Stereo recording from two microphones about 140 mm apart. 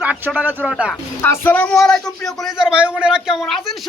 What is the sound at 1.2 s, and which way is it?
A man's voice, 15° left (ahead or behind).